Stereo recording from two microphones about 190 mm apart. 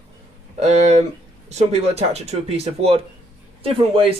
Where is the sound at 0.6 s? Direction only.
35° right (ahead or behind).